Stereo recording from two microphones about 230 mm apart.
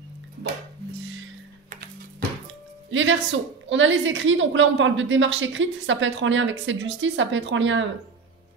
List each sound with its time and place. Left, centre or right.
1.7 s music: right
2.9 s a woman's voice: right